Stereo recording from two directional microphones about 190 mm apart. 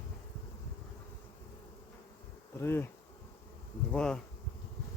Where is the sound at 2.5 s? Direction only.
10° left (ahead or behind).